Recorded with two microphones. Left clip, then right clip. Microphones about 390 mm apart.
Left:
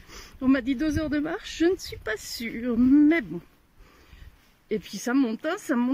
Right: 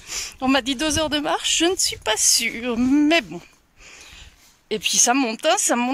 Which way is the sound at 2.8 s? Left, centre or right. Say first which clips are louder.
Even; centre.